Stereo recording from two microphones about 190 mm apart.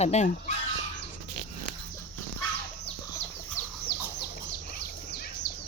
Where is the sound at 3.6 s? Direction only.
40° left (ahead or behind).